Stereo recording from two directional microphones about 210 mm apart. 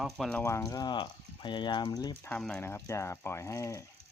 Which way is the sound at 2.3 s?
5° left (ahead or behind).